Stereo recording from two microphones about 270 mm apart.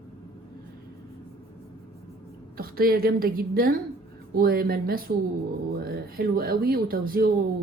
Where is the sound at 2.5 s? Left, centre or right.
Right.